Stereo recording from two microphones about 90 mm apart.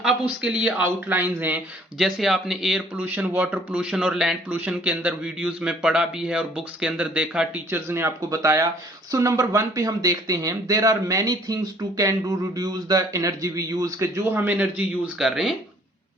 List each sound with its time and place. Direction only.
0.0 s speech: 10° right (ahead or behind)
1.0 s a man's voice: 25° right (ahead or behind)
2.0 s speech: 5° right (ahead or behind)
2.9 s speech: 20° right (ahead or behind)
7.7 s a man's voice: 25° right (ahead or behind)
8.4 s speech: 40° right (ahead or behind)
14.0 s speech: 30° right (ahead or behind)
14.3 s a man's voice: 20° right (ahead or behind)
15.2 s speech: 5° right (ahead or behind)